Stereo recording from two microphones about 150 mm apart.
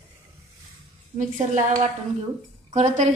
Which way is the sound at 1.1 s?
55° right (ahead or behind).